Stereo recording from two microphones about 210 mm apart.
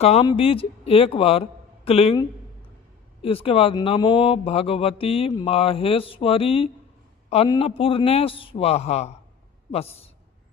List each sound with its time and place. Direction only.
0.0 s a man's voice: 30° left (ahead or behind)